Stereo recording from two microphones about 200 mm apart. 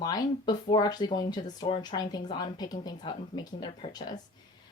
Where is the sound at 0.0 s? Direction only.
20° left (ahead or behind).